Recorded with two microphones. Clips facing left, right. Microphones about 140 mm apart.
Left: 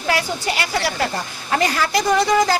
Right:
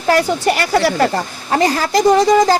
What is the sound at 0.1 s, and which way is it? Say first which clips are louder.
Speech: right 8 dB; 50° right (ahead or behind).